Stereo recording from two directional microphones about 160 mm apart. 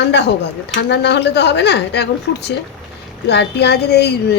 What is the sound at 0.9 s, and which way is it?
Speech, 90° left.